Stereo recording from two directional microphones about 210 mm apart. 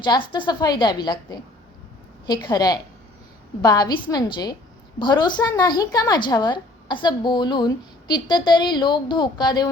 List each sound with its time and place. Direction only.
0.0 s a woman's voice: 20° left (ahead or behind)